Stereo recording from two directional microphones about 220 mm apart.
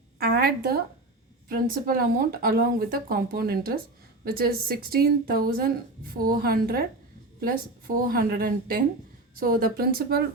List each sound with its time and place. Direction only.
0.2 s a sound: 45° right (ahead or behind)
1.5 s speech: 40° right (ahead or behind)
8.0 s a woman's voice: 40° right (ahead or behind)